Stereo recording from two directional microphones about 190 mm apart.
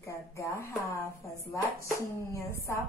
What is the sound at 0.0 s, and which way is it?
Speech, 15° left (ahead or behind).